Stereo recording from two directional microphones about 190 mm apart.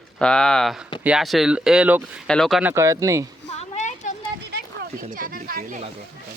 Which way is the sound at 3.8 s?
40° left (ahead or behind).